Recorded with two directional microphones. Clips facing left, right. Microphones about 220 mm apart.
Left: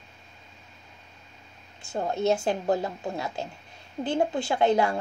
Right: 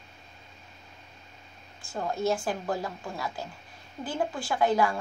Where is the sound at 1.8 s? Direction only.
25° left (ahead or behind).